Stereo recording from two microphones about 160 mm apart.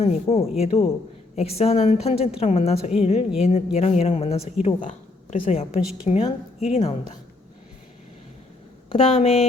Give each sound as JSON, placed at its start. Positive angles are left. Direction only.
{"t": 0.0, "sound": "a woman's voice", "side_deg": 40}
{"t": 8.9, "sound": "a woman's voice", "side_deg": 40}